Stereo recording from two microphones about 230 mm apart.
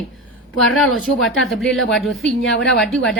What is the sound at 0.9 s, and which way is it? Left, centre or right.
A woman's voice, centre.